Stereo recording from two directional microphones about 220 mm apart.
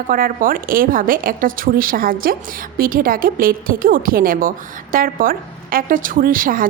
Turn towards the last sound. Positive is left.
turn(degrees=-40)  # may be behind; listen again after turning